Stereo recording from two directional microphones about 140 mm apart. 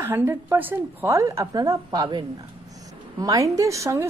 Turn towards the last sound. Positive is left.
turn(degrees=-20)  # may be behind; listen again after turning